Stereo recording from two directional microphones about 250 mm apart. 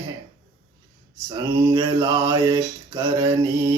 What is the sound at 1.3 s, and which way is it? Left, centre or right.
Mantra, centre.